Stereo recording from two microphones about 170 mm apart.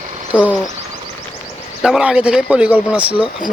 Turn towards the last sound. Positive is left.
turn(degrees=-5)  # may be behind; listen again after turning